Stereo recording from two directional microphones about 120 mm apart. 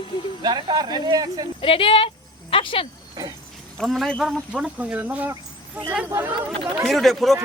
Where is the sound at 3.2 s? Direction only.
30° right (ahead or behind).